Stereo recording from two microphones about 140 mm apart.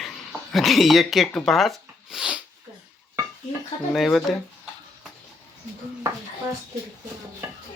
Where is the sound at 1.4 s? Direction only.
Centre (ahead or behind).